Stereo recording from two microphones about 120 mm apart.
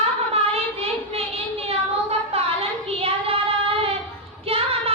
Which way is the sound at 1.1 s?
55° right (ahead or behind).